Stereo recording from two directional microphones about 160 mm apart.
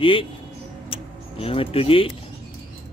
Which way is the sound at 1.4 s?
35° left (ahead or behind).